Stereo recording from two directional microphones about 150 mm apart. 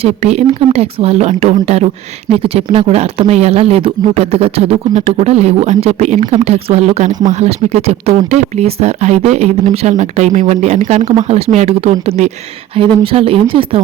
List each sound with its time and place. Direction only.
0.2 s speech: 45° right (ahead or behind)